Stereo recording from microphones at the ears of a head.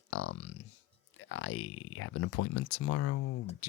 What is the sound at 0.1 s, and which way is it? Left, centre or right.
Clicking, left.